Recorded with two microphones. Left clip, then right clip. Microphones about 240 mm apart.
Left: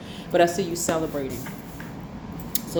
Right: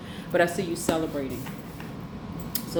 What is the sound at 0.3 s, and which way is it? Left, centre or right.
Speech, left.